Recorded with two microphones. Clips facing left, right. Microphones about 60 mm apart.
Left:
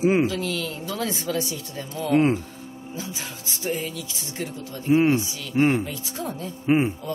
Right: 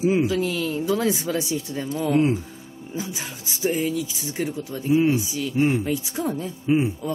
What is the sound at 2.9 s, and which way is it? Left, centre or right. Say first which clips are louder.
Speech: right 4 dB; centre.